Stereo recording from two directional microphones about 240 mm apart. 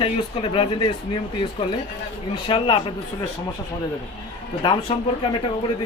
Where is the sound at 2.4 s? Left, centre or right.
Left.